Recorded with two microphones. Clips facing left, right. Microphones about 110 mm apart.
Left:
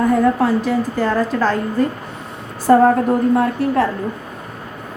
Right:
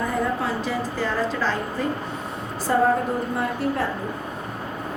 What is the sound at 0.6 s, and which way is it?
Speech, 45° left (ahead or behind).